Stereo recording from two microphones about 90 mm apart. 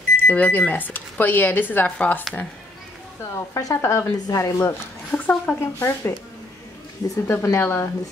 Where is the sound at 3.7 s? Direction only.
30° left (ahead or behind).